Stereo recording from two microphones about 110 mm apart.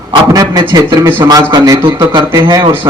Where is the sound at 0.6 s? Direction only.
40° right (ahead or behind).